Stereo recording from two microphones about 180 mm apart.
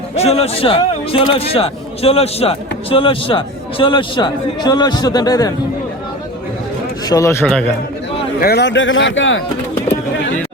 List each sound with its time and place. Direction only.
0.2 s a man's voice: 35° left (ahead or behind)
7.1 s a man's voice: 15° left (ahead or behind)
8.4 s a man's voice: 60° left (ahead or behind); by 9.4 s 90° left